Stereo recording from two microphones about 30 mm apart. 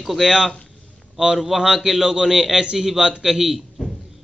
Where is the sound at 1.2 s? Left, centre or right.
Right.